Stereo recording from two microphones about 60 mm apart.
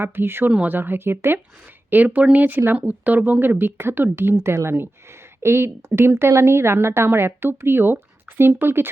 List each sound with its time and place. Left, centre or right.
0.0 s speech: right
0.5 s speech: right
0.8 s speech: right
1.9 s speech: right
4.4 s a woman's voice: right